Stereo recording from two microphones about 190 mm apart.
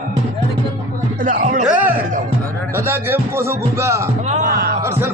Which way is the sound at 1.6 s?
10° right (ahead or behind).